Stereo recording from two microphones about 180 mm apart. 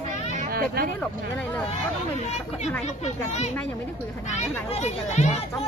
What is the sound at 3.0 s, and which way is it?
Speech, 40° left (ahead or behind).